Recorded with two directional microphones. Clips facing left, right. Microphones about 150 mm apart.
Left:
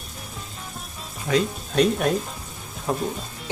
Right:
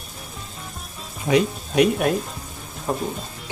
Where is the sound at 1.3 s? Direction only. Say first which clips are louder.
Right 3 dB; 15° right (ahead or behind).